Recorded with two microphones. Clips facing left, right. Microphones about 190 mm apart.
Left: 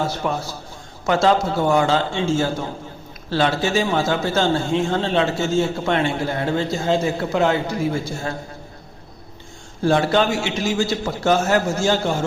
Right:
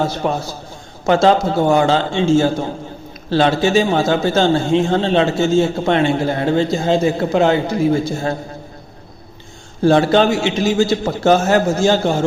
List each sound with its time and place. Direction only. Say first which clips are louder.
0.2 s a man's voice: right 4 dB; 25° right (ahead or behind)
9.8 s a man's voice: right 5 dB; 30° right (ahead or behind)